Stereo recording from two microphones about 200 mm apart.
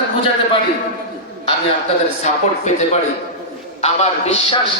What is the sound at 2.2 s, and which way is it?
A man's voice, 35° left (ahead or behind).